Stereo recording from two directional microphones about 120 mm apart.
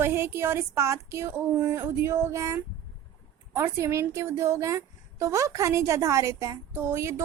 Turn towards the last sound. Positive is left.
turn(degrees=-20)  # may be behind; listen again after turning